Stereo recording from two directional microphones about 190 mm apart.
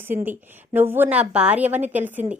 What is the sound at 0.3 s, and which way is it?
A woman's voice, 10° right (ahead or behind).